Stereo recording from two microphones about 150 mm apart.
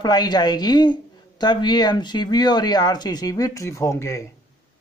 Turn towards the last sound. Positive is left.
turn(degrees=20)  # may be behind; listen again after turning